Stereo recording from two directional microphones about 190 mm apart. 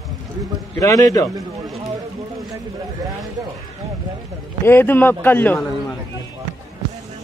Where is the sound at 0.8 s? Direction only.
15° left (ahead or behind).